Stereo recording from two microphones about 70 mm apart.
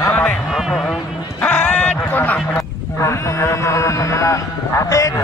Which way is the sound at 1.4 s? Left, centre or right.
Left.